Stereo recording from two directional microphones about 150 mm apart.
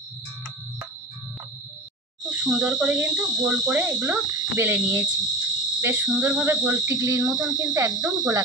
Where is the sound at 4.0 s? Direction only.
25° right (ahead or behind).